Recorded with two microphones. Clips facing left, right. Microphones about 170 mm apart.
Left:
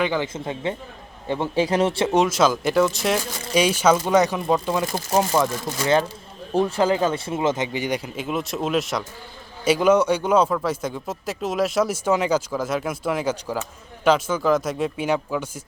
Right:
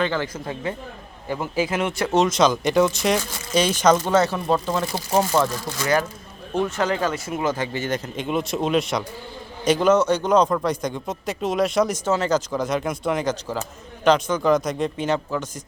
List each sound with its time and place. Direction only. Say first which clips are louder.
0.0 s speech: left 1 dB; 15° left (ahead or behind); by 2.0 s 30° left (ahead or behind)
2.1 s a man's voice: right 2 dB; 5° left (ahead or behind)
5.6 s a man's voice: left 2 dB; 25° left (ahead or behind)